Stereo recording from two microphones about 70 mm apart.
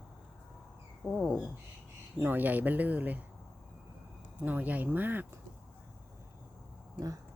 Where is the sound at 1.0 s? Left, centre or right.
Centre.